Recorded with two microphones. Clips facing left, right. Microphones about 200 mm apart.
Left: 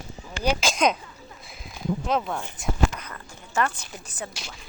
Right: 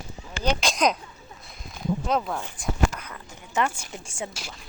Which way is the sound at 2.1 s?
Centre (ahead or behind).